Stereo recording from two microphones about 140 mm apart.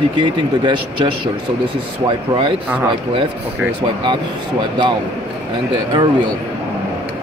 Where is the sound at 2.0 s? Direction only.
35° right (ahead or behind).